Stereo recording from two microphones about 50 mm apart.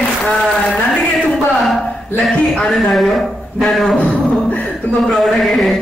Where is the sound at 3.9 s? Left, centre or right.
Left.